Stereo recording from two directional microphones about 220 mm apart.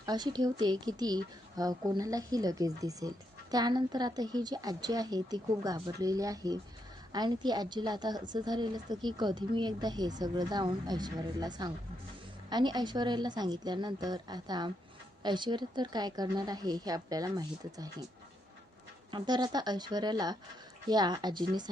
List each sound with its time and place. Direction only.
0.0 s a woman's voice: 20° right (ahead or behind)
19.1 s a woman's voice: 20° right (ahead or behind)